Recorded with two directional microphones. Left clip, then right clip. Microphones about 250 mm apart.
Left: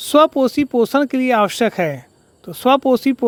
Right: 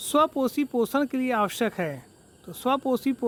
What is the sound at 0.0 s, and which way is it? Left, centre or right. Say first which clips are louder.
Speech: left 10 dB; left.